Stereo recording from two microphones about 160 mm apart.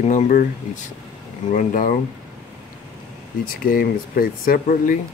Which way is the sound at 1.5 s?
55° left (ahead or behind).